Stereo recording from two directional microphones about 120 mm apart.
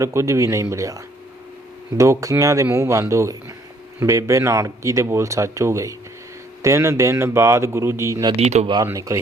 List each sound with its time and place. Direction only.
0.0 s speech: 25° right (ahead or behind)
2.0 s speech: 25° right (ahead or behind)
8.4 s speech: 70° right (ahead or behind)
8.6 s speech: 40° right (ahead or behind)
8.9 s speech: 25° right (ahead or behind)